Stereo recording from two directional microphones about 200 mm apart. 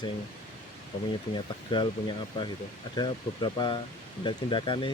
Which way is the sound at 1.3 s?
25° left (ahead or behind).